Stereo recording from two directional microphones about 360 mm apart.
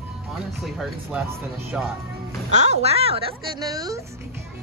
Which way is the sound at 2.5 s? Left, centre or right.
Centre.